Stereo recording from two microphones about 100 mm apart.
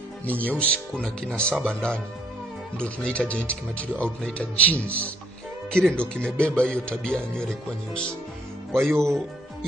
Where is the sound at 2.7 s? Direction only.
10° left (ahead or behind).